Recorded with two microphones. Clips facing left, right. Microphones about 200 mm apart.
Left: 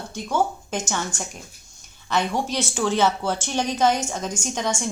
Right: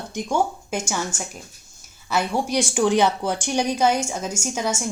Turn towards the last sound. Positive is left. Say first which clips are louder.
# right 1 dB
turn(degrees=-10)  # may be behind; listen again after turning